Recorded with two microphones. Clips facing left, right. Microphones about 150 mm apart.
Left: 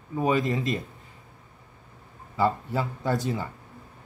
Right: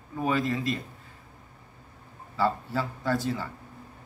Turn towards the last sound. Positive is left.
turn(degrees=20)  # may be behind; listen again after turning